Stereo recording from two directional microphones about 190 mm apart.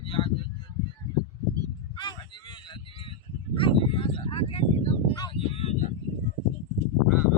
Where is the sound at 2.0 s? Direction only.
25° left (ahead or behind).